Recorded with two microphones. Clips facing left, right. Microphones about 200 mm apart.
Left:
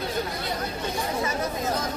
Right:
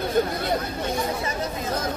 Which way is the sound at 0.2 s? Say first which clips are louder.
Right 10 dB; 55° right (ahead or behind).